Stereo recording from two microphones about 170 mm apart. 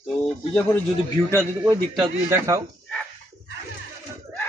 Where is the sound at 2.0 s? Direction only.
20° right (ahead or behind).